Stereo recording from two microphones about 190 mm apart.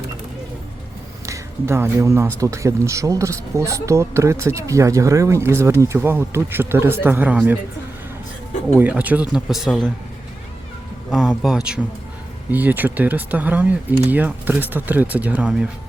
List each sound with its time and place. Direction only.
1.3 s speech: 15° right (ahead or behind)
8.8 s speech: 10° right (ahead or behind)
11.1 s speech: centre (ahead or behind)